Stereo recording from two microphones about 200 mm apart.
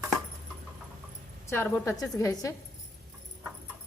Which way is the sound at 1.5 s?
10° left (ahead or behind).